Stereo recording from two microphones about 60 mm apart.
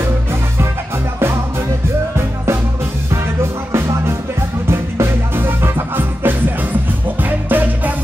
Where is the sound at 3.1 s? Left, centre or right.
Right.